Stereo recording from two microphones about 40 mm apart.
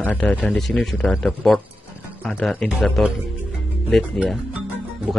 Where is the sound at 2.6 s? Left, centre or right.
Centre.